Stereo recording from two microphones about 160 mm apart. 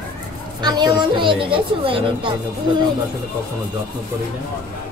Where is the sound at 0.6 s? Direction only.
25° right (ahead or behind).